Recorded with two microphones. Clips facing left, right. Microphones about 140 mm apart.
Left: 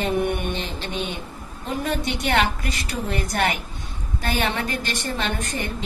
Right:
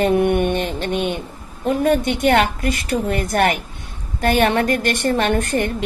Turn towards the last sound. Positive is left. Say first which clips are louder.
# right 9 dB
turn(degrees=-60)  # may be behind; listen again after turning